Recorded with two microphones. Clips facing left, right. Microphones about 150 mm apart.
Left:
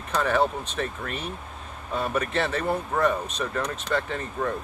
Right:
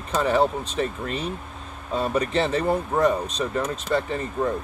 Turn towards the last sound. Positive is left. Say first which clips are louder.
# right 3 dB
turn(degrees=-15)  # may be behind; listen again after turning